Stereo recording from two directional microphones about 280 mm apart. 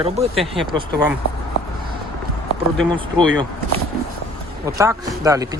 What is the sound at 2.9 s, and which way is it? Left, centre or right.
Speech, centre.